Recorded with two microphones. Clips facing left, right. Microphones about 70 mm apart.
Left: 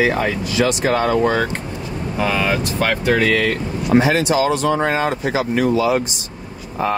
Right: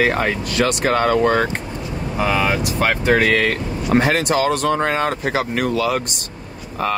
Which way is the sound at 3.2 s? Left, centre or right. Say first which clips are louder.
Even; right.